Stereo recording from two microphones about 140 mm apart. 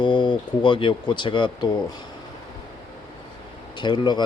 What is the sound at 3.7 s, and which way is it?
Speech, 35° left (ahead or behind).